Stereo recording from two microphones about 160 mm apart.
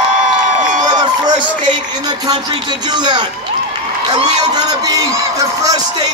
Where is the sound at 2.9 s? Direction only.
30° right (ahead or behind).